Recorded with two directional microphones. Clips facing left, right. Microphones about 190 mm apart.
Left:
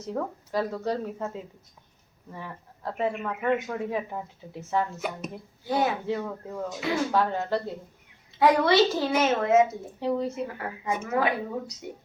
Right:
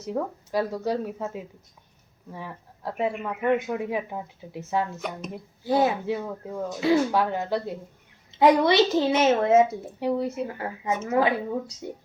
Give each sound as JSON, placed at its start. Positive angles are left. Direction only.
{"t": 0.1, "sound": "speech", "side_deg": -10}
{"t": 5.6, "sound": "a woman's voice", "side_deg": -30}
{"t": 6.1, "sound": "speech", "side_deg": -10}
{"t": 6.7, "sound": "a woman's voice", "side_deg": -30}
{"t": 7.1, "sound": "a woman's voice", "side_deg": -10}
{"t": 10.0, "sound": "speech", "side_deg": -10}
{"t": 10.4, "sound": "a woman's voice", "side_deg": -25}